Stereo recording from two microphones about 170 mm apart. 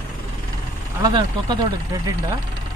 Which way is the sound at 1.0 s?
25° right (ahead or behind).